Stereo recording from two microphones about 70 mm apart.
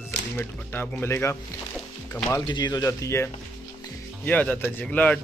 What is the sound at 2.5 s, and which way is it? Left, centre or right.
Speech, left.